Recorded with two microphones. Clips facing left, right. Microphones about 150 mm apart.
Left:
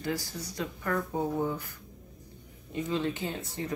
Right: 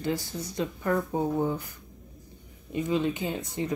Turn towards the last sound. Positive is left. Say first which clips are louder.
# right 4 dB
turn(degrees=-20)  # may be behind; listen again after turning